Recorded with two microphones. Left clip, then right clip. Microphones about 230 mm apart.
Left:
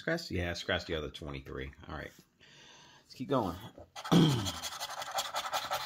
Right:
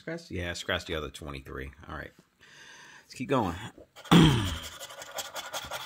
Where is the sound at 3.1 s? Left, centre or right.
Right.